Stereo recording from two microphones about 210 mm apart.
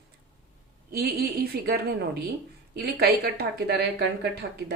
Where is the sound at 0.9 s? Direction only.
50° right (ahead or behind).